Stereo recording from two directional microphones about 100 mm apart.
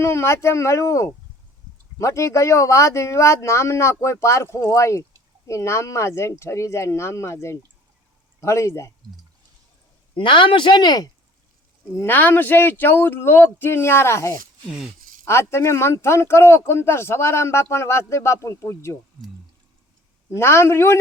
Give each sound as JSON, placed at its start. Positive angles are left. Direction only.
{"t": 0.0, "sound": "speech", "side_deg": 25}
{"t": 10.2, "sound": "speech", "side_deg": 55}
{"t": 11.9, "sound": "speech", "side_deg": 20}
{"t": 20.3, "sound": "speech", "side_deg": 25}